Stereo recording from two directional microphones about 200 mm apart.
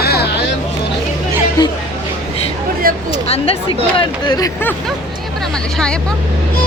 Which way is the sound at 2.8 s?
45° right (ahead or behind).